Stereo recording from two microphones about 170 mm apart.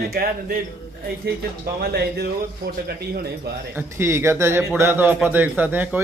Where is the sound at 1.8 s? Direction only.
75° right (ahead or behind).